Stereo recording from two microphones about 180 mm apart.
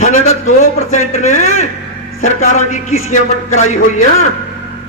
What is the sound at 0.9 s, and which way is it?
A man's voice, 40° left (ahead or behind).